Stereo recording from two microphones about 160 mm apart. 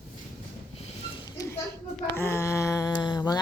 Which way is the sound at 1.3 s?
20° left (ahead or behind).